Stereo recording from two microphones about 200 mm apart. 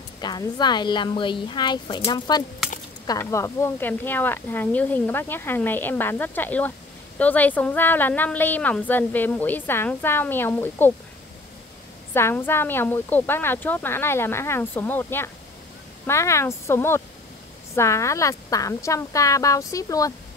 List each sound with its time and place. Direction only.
0.2 s a woman's voice: 20° left (ahead or behind)
12.1 s a woman's voice: 10° left (ahead or behind)